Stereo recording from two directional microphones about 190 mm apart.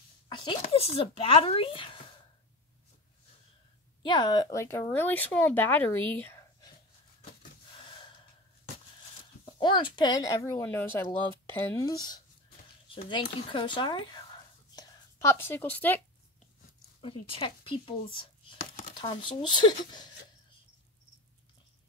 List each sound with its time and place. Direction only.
0.3 s speech: 25° left (ahead or behind)
4.0 s speech: 25° left (ahead or behind)
6.2 s whispering: 15° left (ahead or behind)
9.4 s speech: 25° left (ahead or behind)
17.0 s speech: 30° left (ahead or behind)